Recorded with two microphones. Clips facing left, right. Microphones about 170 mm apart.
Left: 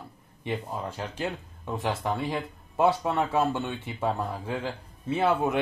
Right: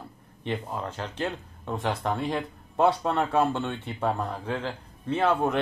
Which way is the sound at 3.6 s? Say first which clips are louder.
Right 1 dB; centre (ahead or behind).